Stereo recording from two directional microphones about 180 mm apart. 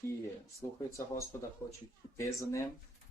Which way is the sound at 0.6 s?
15° left (ahead or behind).